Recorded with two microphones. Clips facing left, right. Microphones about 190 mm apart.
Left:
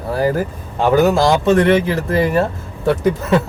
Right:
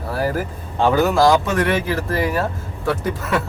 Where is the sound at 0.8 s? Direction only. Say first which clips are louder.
Left 2 dB; 20° left (ahead or behind).